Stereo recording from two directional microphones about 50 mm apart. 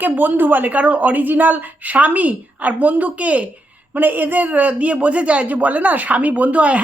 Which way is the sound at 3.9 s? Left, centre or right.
Right.